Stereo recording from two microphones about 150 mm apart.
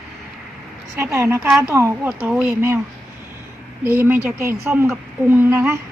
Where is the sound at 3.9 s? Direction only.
15° right (ahead or behind).